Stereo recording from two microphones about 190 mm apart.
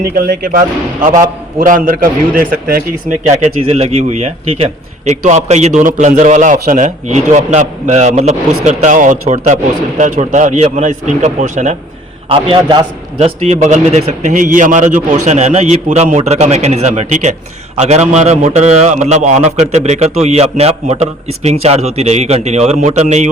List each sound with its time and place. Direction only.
0.0 s a man's voice: 55° right (ahead or behind)
3.2 s a man's voice: 35° right (ahead or behind)
12.3 s a man's voice: 25° right (ahead or behind)